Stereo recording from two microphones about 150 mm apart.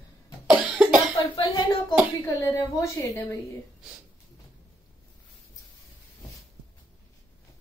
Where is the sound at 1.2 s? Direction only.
30° left (ahead or behind).